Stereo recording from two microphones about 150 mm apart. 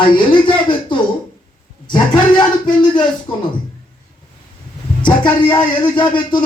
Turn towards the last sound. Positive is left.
turn(degrees=30)  # may be behind; listen again after turning